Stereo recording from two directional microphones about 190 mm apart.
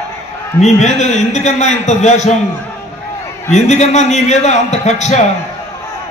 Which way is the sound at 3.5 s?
35° left (ahead or behind).